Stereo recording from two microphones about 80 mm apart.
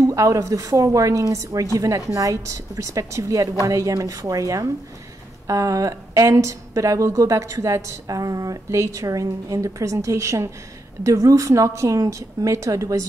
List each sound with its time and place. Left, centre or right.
0.0 s a woman's voice: right